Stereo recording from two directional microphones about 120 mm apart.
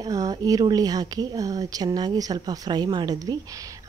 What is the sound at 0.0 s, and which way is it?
Speech, 30° right (ahead or behind).